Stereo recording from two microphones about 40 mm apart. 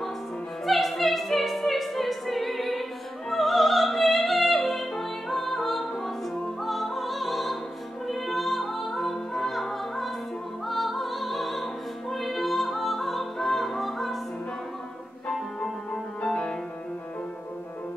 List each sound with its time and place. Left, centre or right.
0.7 s opera: centre
6.4 s music: centre
15.6 s music: left